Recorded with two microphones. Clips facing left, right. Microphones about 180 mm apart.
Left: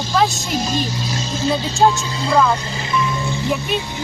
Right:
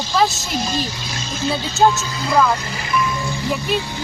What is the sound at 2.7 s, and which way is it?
Music, 25° left (ahead or behind).